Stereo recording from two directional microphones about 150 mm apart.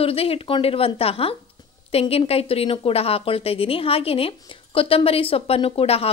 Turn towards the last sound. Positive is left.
turn(degrees=40)  # may be behind; listen again after turning